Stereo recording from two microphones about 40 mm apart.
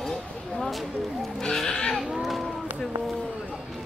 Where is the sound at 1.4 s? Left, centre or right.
Centre.